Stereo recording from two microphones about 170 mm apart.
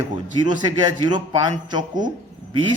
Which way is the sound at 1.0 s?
25° right (ahead or behind).